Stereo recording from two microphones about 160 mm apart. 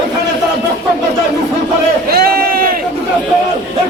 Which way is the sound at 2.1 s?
70° right (ahead or behind).